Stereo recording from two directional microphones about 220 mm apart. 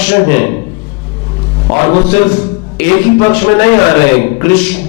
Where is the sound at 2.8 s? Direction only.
10° left (ahead or behind).